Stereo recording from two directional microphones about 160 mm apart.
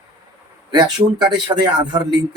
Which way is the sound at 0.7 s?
25° right (ahead or behind).